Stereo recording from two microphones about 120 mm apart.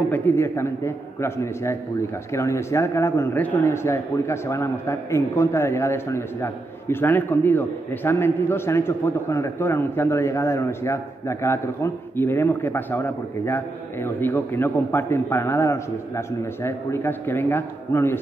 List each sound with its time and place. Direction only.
0.1 s speech: 15° left (ahead or behind)